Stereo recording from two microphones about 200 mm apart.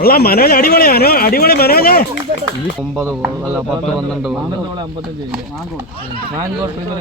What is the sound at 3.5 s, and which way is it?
Speech, 5° right (ahead or behind).